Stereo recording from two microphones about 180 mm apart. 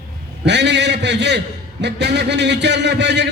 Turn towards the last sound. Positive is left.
turn(degrees=-75)  # may be behind; listen again after turning